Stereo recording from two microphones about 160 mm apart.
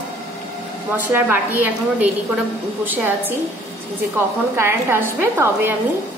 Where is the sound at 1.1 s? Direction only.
10° right (ahead or behind).